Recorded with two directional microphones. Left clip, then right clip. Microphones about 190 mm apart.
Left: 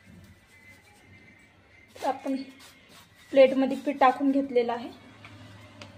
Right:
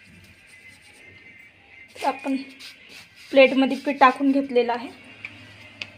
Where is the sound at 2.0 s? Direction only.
20° right (ahead or behind).